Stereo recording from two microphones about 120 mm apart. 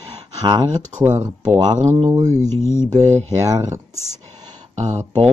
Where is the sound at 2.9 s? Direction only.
70° right (ahead or behind).